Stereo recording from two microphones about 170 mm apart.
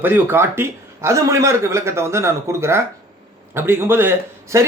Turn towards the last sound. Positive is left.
turn(degrees=-15)  # may be behind; listen again after turning